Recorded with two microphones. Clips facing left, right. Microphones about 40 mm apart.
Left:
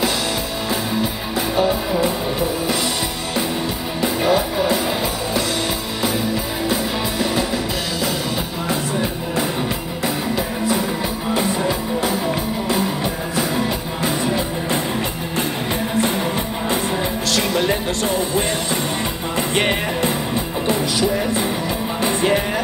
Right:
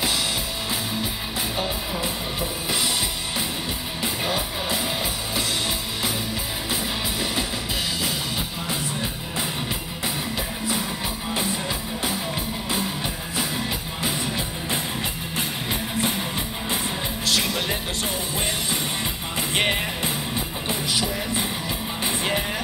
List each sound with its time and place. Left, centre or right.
4.0 s music: centre
17.4 s music: centre
19.5 s music: centre
22.0 s music: centre